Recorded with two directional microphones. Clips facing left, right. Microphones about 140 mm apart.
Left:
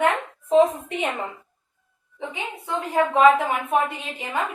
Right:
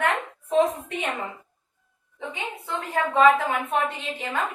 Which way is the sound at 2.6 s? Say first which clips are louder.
Left 5 dB; 15° left (ahead or behind).